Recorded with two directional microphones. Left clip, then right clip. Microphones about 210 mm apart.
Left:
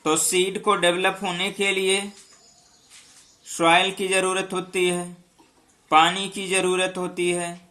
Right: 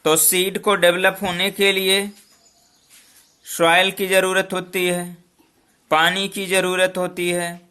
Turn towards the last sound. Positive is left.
turn(degrees=-50)  # may be behind; listen again after turning